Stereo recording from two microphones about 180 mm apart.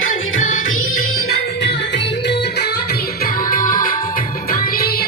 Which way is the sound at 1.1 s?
65° left (ahead or behind).